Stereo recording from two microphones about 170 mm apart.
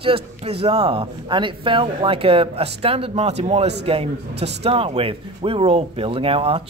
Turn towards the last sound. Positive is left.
turn(degrees=-35)  # may be behind; listen again after turning